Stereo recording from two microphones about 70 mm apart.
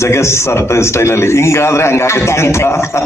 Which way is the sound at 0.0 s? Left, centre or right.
Left.